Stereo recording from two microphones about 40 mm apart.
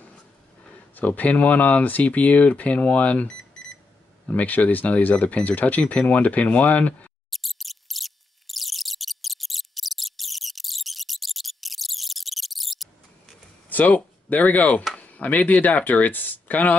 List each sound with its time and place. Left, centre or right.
0.9 s speech: left
4.3 s speech: left
7.2 s squeak: centre
13.7 s speech: left